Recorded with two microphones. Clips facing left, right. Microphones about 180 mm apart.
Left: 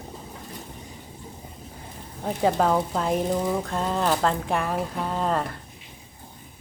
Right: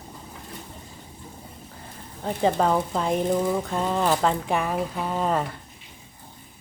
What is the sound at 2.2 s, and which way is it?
Speech, 5° left (ahead or behind).